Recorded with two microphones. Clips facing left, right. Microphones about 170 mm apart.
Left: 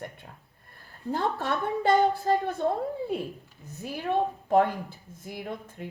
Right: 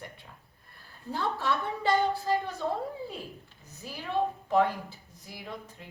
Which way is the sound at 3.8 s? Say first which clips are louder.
Left 3 dB; 55° left (ahead or behind).